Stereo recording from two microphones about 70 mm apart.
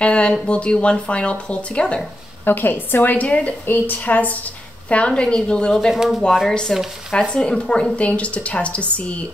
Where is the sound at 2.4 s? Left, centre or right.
Left; by 5.9 s centre.